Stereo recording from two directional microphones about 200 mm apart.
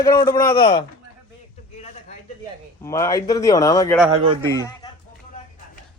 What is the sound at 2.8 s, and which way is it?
Speech, 15° left (ahead or behind).